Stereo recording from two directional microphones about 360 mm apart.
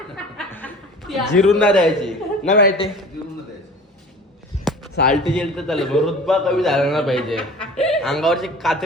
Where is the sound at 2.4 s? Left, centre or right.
Left.